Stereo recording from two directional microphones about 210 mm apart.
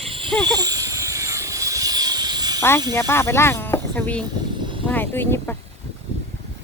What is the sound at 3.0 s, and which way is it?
Speech, 10° left (ahead or behind).